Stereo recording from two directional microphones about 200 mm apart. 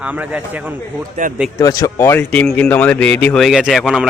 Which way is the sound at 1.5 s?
15° left (ahead or behind).